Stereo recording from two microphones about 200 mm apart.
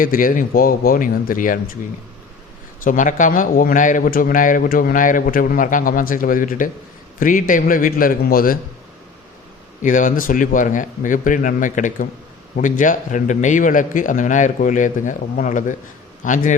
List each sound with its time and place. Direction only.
0.0 s a man's voice: 45° left (ahead or behind)
2.8 s a man's voice: 40° left (ahead or behind)
9.8 s a man's voice: 40° left (ahead or behind)